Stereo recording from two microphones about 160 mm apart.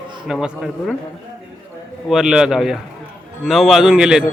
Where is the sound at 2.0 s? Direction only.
5° right (ahead or behind).